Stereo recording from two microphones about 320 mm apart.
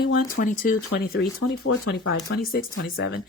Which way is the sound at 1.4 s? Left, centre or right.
Left.